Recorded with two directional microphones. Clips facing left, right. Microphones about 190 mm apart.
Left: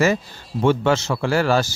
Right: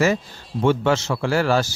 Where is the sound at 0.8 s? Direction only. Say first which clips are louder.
Left 1 dB; 45° left (ahead or behind).